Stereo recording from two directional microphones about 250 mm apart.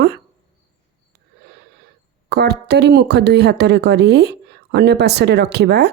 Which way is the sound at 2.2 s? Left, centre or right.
Right.